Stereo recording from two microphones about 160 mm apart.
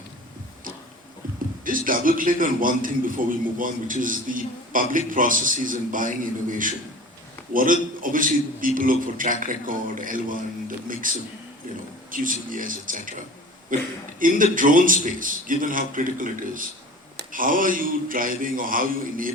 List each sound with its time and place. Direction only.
1.6 s a man's voice: 60° right (ahead or behind)